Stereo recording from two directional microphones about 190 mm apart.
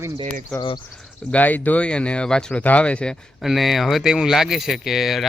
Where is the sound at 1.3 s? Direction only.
10° left (ahead or behind).